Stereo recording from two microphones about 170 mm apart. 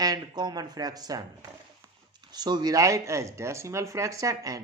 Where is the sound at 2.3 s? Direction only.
25° right (ahead or behind).